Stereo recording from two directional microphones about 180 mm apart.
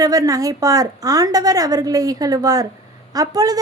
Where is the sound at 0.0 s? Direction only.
20° right (ahead or behind).